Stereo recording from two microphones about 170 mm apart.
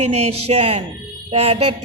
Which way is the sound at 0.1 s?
40° right (ahead or behind).